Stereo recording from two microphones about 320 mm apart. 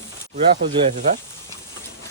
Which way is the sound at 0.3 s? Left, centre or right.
Centre.